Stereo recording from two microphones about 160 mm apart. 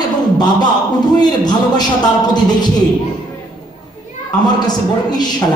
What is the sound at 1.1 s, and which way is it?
A man's voice, 25° left (ahead or behind).